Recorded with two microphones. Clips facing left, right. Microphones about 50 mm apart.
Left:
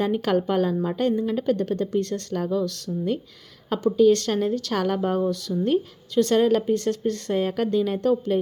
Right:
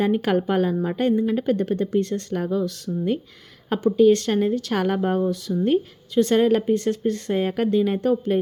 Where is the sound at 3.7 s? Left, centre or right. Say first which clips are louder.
Right 1 dB; right.